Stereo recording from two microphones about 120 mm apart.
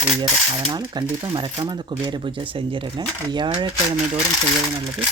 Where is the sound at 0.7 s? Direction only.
40° right (ahead or behind).